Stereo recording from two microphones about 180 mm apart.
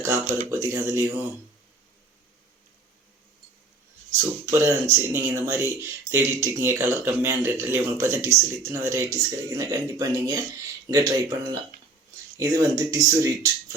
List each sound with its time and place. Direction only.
0.0 s speech: 15° right (ahead or behind)
4.4 s speech: 15° right (ahead or behind)
12.4 s speech: 20° right (ahead or behind)